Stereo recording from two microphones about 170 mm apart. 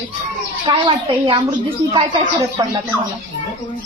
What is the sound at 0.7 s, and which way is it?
A woman's voice, 30° right (ahead or behind).